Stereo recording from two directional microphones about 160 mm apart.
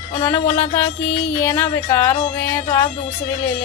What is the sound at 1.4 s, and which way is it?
Speech, 15° left (ahead or behind).